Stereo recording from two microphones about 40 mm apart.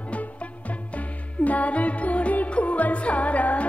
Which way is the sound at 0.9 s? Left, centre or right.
Left.